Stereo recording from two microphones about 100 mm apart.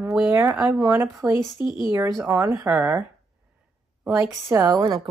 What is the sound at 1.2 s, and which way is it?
A woman's voice, 30° right (ahead or behind).